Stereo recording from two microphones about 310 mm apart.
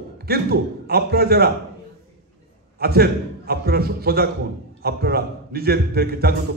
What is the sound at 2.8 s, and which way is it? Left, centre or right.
A man's voice, right.